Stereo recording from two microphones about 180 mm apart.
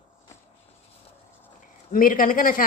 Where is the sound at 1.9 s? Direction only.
50° left (ahead or behind).